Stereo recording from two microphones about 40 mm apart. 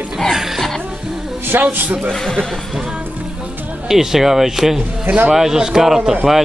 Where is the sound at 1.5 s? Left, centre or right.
Right.